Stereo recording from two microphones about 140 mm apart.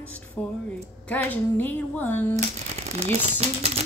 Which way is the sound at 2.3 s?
50° right (ahead or behind).